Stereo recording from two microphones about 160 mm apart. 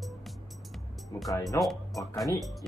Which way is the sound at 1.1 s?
25° left (ahead or behind).